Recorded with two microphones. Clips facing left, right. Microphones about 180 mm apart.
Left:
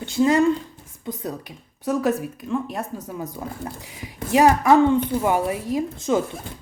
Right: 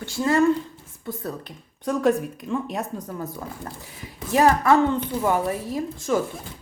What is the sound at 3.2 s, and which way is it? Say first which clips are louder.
Speech: left 2 dB; 15° left (ahead or behind).